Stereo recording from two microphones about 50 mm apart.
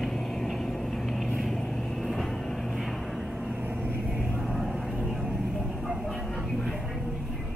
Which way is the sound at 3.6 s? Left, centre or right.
Right.